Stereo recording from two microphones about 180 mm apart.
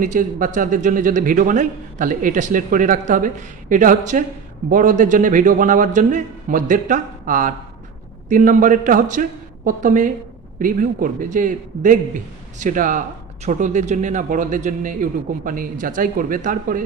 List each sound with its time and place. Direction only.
0.0 s a man's voice: 45° right (ahead or behind)